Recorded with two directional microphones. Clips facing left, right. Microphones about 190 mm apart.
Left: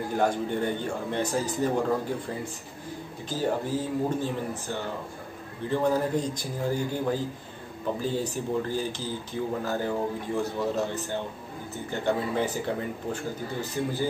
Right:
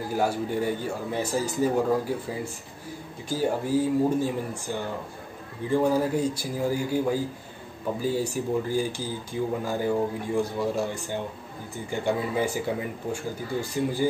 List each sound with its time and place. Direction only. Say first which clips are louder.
0.1 s a man's voice: even; 5° right (ahead or behind)